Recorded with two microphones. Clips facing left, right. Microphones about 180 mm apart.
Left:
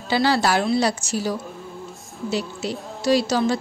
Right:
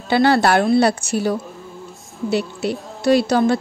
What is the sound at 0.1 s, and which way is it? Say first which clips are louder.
A woman's voice: right 5 dB; 55° right (ahead or behind).